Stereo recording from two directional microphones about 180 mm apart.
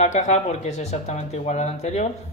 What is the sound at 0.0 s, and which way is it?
Speech, 40° left (ahead or behind).